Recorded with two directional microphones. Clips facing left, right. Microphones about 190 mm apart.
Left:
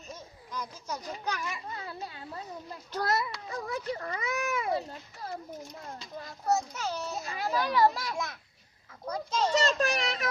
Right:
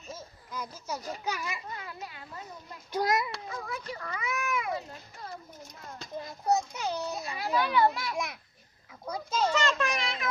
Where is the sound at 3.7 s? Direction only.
35° left (ahead or behind).